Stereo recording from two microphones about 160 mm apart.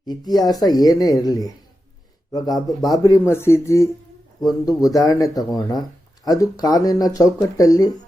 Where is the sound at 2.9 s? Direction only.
20° left (ahead or behind).